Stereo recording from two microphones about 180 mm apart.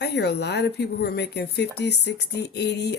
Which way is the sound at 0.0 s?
65° left (ahead or behind).